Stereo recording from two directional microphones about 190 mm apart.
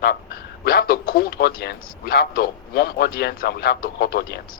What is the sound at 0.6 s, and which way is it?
Speech, 50° left (ahead or behind).